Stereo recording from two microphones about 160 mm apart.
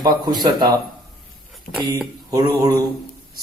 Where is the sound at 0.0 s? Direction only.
25° right (ahead or behind).